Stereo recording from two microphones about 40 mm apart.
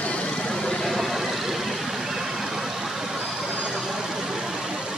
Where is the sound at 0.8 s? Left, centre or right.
Centre.